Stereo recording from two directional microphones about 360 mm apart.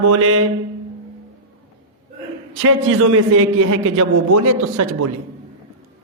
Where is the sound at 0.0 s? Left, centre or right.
Right.